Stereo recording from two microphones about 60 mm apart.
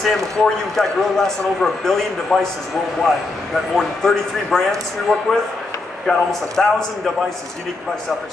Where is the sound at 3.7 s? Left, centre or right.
Centre.